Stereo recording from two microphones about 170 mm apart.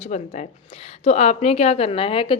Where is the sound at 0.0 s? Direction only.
45° left (ahead or behind).